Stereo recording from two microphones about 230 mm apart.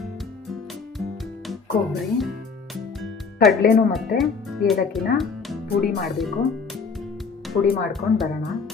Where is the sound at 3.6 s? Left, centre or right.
Left.